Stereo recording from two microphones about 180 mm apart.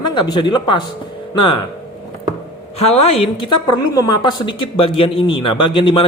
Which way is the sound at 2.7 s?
35° left (ahead or behind).